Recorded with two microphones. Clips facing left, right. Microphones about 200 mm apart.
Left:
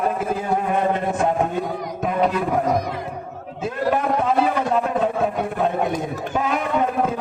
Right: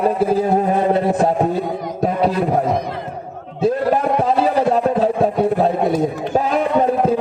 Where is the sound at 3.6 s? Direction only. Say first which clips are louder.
Right 5 dB; 35° right (ahead or behind).